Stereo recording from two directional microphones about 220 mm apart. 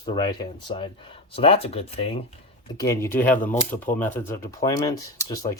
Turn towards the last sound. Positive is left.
turn(degrees=15)  # may be behind; listen again after turning